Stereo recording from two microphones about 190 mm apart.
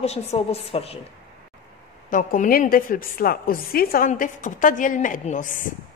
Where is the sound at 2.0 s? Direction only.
45° left (ahead or behind).